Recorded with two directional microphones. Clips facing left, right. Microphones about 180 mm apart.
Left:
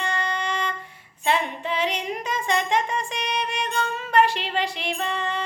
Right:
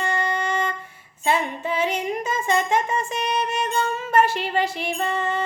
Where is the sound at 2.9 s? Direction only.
5° right (ahead or behind).